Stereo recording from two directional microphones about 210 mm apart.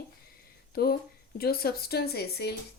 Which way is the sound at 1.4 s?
45° left (ahead or behind).